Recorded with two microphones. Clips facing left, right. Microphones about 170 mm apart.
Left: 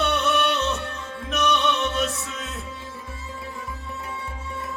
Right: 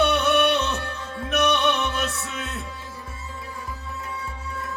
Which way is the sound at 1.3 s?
65° right (ahead or behind).